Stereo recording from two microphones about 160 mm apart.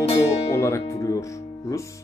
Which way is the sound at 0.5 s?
15° left (ahead or behind).